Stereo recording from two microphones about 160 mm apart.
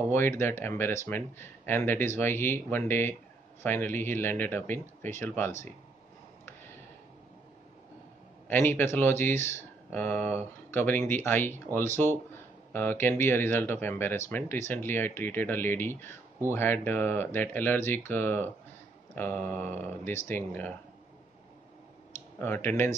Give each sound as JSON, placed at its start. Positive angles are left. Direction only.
{"t": 0.1, "sound": "speech", "side_deg": 15}
{"t": 8.5, "sound": "speech", "side_deg": 15}
{"t": 22.1, "sound": "speech", "side_deg": 15}